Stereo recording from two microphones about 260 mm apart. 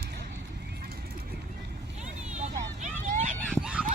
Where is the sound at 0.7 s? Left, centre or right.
Right.